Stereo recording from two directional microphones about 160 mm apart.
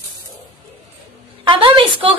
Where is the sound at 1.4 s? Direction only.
30° right (ahead or behind).